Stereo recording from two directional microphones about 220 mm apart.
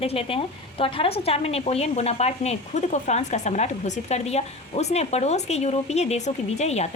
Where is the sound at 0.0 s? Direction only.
25° left (ahead or behind).